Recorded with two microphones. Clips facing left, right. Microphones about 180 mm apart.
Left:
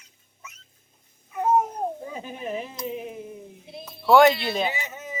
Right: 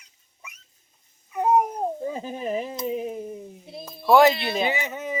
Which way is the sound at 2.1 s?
35° right (ahead or behind).